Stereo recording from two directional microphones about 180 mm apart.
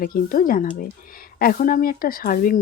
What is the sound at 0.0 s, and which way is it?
Speech, 50° left (ahead or behind).